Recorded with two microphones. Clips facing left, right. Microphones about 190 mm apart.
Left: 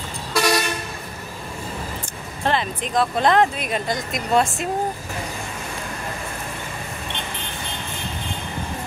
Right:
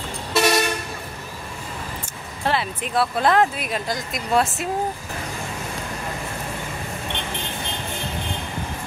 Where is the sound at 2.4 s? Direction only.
5° right (ahead or behind).